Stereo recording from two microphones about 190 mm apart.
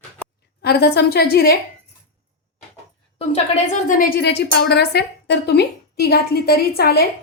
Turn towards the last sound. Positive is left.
turn(degrees=55)  # may be behind; listen again after turning